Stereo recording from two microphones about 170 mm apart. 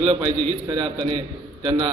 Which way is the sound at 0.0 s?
35° right (ahead or behind).